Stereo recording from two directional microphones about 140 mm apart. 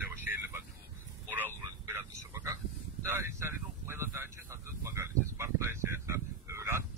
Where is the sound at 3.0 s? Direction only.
20° right (ahead or behind).